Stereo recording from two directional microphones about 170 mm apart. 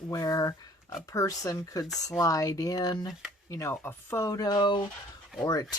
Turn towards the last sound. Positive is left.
turn(degrees=20)  # may be behind; listen again after turning